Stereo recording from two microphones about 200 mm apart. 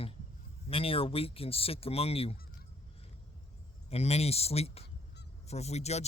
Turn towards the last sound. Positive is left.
turn(degrees=35)  # may be behind; listen again after turning